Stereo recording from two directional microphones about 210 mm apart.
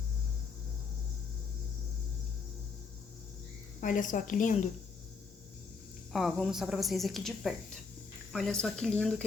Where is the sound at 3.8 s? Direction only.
40° left (ahead or behind).